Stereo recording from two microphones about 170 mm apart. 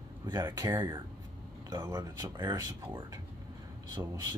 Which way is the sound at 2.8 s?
10° right (ahead or behind).